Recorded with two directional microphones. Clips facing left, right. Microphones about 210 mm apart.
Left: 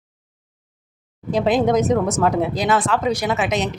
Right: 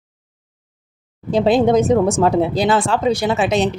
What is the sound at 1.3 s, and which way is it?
A woman's voice, 30° right (ahead or behind).